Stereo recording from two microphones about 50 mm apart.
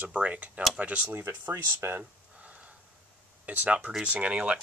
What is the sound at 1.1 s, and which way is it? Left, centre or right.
Speech, right.